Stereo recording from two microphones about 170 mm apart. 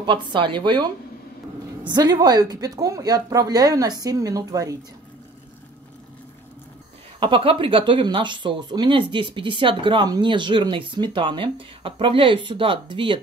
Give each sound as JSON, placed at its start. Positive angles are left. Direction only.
{"t": 0.0, "sound": "speech", "side_deg": -30}
{"t": 1.9, "sound": "speech", "side_deg": -25}
{"t": 7.2, "sound": "speech", "side_deg": -30}